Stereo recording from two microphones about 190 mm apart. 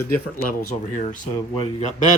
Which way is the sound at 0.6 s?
45° left (ahead or behind).